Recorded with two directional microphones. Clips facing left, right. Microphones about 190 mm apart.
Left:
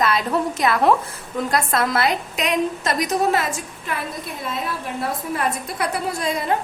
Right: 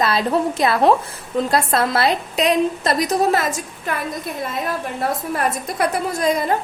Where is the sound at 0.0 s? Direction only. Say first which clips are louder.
Right 2 dB; 30° right (ahead or behind).